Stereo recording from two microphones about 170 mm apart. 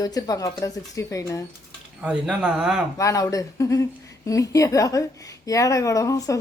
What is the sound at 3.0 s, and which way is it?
Speech, 20° left (ahead or behind).